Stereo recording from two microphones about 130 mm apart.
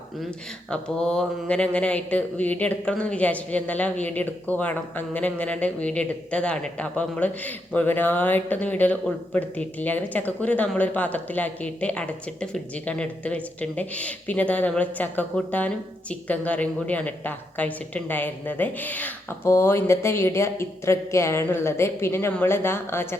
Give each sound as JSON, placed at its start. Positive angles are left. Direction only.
{"t": 0.7, "sound": "speech", "side_deg": 5}